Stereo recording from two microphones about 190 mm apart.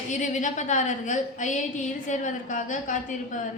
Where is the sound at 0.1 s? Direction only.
40° left (ahead or behind).